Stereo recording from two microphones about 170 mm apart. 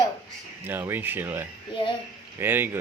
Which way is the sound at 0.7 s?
10° right (ahead or behind).